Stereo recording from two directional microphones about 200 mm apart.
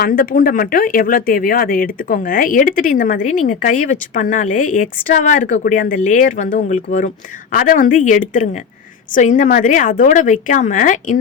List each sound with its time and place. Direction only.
0.0 s speech: 45° left (ahead or behind)